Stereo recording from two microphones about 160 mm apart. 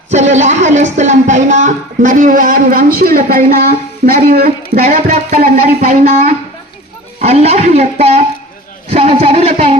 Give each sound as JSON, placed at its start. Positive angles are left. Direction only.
{"t": 0.1, "sound": "speech", "side_deg": -45}